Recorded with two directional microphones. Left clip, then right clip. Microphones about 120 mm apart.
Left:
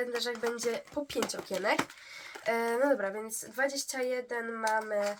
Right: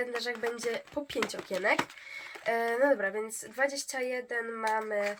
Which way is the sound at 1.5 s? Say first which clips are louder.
Right 1 dB; 40° right (ahead or behind).